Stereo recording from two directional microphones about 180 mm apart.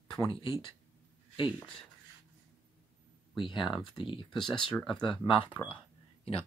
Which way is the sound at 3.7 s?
25° left (ahead or behind).